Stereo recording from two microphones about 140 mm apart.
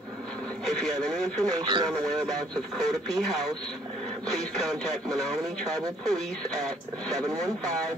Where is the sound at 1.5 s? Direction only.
35° right (ahead or behind).